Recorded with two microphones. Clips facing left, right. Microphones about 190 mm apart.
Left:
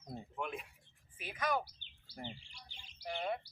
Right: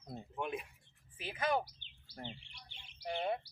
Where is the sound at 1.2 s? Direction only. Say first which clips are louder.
Right 2 dB; 25° right (ahead or behind).